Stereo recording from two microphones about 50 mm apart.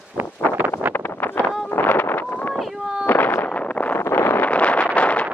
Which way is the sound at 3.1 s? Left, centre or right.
Left.